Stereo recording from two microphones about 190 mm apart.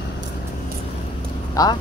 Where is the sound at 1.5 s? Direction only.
20° left (ahead or behind).